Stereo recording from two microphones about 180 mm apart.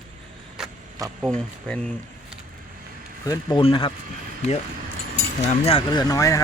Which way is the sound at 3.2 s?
20° left (ahead or behind).